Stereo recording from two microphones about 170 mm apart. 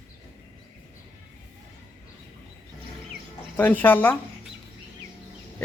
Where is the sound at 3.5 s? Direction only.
10° left (ahead or behind).